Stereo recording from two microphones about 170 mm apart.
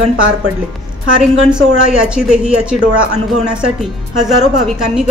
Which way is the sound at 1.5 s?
5° right (ahead or behind).